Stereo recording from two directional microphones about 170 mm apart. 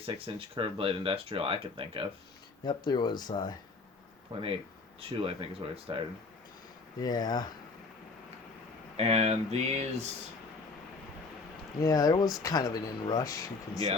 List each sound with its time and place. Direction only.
0.0 s speech: 30° right (ahead or behind)
2.6 s speech: 25° left (ahead or behind)
4.3 s speech: 30° right (ahead or behind)
7.0 s speech: 25° left (ahead or behind)
9.0 s speech: 40° right (ahead or behind)
11.8 s speech: 20° left (ahead or behind)